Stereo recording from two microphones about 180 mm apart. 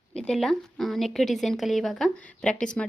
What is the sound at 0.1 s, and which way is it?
A woman's voice, 5° left (ahead or behind).